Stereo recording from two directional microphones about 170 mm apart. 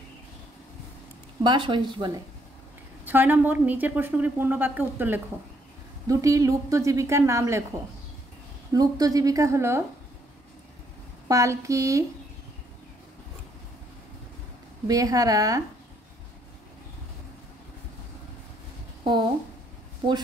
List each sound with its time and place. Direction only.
1.4 s a woman's voice: 30° right (ahead or behind)
3.1 s a woman's voice: 10° right (ahead or behind)
8.7 s a woman's voice: 20° right (ahead or behind)
11.2 s a woman's voice: 20° right (ahead or behind)
14.9 s a woman's voice: 20° right (ahead or behind)